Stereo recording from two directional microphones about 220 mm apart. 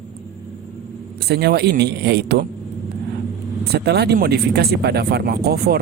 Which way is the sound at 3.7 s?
50° right (ahead or behind).